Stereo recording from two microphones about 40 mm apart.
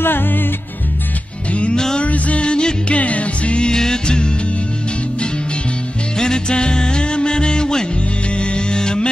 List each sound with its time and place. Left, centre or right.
0.0 s music: left
1.5 s music: left
3.7 s music: centre
6.1 s music: centre